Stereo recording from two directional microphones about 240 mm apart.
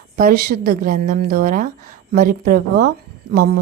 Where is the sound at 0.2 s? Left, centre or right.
Right.